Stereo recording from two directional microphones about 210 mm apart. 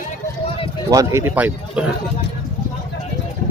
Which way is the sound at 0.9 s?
15° right (ahead or behind).